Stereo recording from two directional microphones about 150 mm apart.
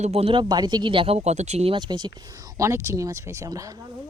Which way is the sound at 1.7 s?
30° right (ahead or behind).